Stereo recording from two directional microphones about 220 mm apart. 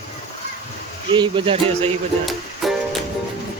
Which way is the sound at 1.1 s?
25° right (ahead or behind).